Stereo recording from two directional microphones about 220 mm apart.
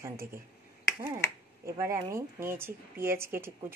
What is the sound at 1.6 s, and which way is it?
A woman's voice, 10° right (ahead or behind).